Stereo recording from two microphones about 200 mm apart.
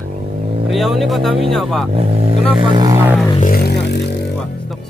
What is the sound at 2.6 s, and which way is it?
Music, 20° right (ahead or behind).